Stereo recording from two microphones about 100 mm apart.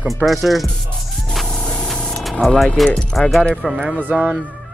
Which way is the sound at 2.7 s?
Centre (ahead or behind).